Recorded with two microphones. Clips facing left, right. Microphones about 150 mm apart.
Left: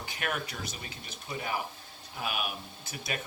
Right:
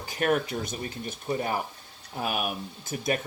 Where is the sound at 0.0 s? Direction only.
40° right (ahead or behind).